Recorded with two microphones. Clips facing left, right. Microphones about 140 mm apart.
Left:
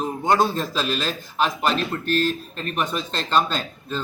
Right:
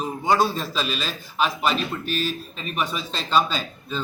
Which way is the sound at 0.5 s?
10° right (ahead or behind).